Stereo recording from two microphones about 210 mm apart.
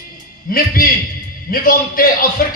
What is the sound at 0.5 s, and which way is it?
Speech, 45° left (ahead or behind).